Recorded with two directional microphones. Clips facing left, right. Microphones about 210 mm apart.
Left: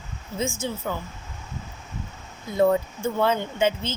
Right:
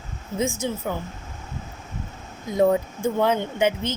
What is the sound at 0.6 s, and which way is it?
Speech, 15° right (ahead or behind).